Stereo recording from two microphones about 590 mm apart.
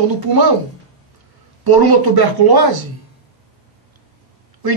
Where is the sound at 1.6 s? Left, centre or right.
Right.